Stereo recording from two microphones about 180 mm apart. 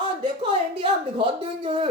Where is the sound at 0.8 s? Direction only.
30° right (ahead or behind).